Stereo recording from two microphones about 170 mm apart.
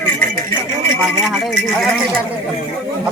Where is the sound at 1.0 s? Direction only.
Centre (ahead or behind).